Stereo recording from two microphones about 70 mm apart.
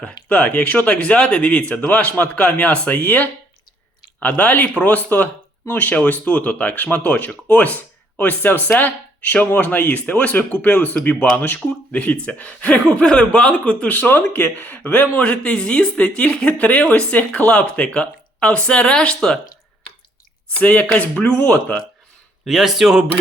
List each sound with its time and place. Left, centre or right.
0.0 s speech: left
20.6 s speech: centre
22.4 s a man's voice: centre